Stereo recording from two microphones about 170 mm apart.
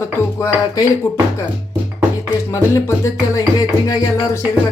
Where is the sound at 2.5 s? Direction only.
15° left (ahead or behind).